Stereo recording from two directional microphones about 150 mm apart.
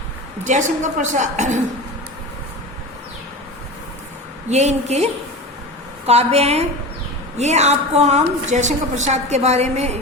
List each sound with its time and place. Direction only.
0.4 s a woman's voice: 55° right (ahead or behind)
4.4 s a woman's voice: 50° right (ahead or behind)
6.1 s a woman's voice: 45° right (ahead or behind)